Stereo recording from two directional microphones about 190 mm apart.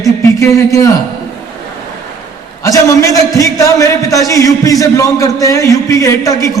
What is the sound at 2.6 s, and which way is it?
A man's voice, 15° left (ahead or behind).